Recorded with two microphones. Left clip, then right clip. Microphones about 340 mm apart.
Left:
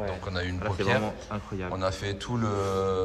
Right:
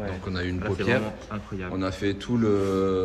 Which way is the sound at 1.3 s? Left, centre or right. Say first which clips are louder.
Even; left.